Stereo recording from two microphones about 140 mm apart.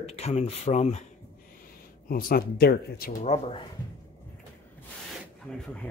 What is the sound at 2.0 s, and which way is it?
Speech, 90° left.